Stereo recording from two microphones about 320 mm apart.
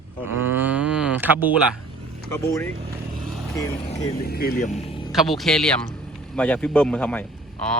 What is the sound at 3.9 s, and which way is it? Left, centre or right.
Speech, left.